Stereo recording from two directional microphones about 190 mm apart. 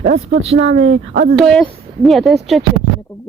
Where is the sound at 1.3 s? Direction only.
Centre (ahead or behind).